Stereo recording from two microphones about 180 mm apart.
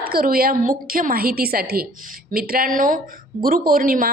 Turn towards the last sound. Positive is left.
turn(degrees=-50)  # may be behind; listen again after turning